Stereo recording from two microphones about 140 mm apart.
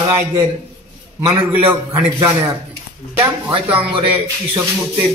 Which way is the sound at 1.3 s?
15° right (ahead or behind).